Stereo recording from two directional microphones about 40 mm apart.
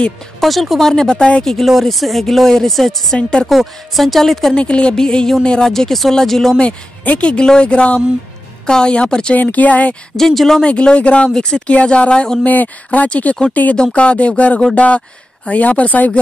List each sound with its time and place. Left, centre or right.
0.4 s speech: centre
1.7 s speech: centre
3.2 s speech: left
3.4 s speech: centre
4.6 s speech: left
5.7 s speech: centre
6.6 s speech: left
9.3 s speech: left
10.1 s speech: centre
10.6 s speech: left
11.3 s speech: centre
11.6 s speech: left
12.4 s speech: left
13.9 s speech: left